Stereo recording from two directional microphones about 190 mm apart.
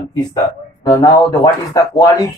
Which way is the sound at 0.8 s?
20° left (ahead or behind).